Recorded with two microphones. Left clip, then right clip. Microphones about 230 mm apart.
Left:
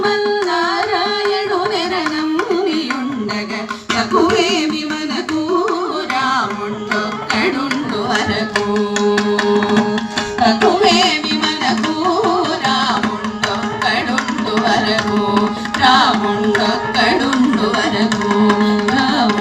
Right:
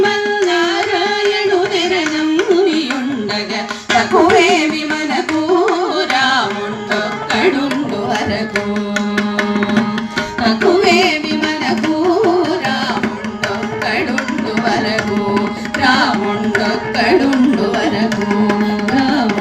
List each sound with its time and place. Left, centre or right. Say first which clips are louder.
3.9 s music: right 4 dB; left
9.1 s music: even; right
14.5 s music: left 1 dB; right